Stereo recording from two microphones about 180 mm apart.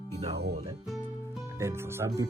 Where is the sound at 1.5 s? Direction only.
15° right (ahead or behind).